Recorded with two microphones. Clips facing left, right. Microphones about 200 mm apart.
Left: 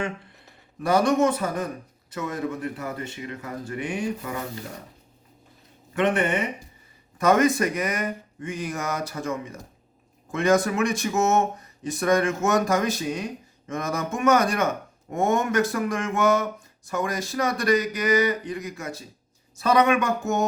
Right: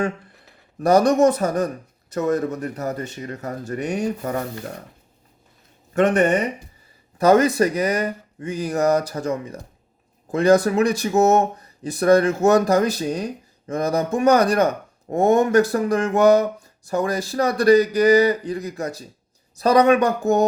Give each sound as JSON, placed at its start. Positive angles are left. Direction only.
{"t": 0.8, "sound": "speech", "side_deg": -40}
{"t": 5.9, "sound": "speech", "side_deg": -45}